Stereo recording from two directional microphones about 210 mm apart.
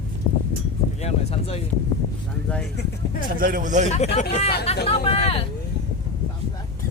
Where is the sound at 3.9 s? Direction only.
30° left (ahead or behind).